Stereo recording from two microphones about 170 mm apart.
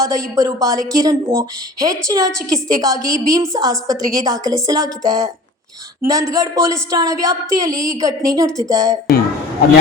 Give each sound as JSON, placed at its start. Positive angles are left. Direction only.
{"t": 0.0, "sound": "a woman's voice", "side_deg": -20}